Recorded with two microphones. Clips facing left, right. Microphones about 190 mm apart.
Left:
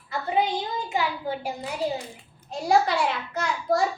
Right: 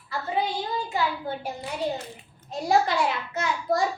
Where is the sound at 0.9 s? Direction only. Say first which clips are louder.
Left 1 dB; 15° left (ahead or behind).